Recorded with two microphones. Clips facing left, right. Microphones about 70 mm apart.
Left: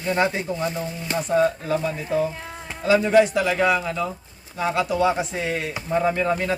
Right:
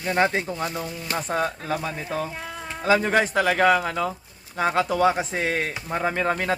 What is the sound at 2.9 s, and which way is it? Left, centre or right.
A man's voice, right.